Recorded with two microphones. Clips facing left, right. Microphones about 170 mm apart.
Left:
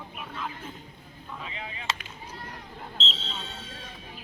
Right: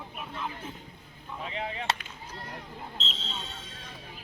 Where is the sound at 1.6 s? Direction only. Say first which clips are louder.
Right 5 dB; 60° right (ahead or behind).